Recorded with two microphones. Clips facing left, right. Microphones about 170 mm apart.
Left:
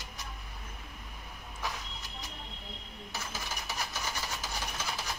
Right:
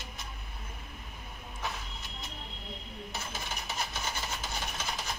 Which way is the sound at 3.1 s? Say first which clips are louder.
Even; 20° right (ahead or behind).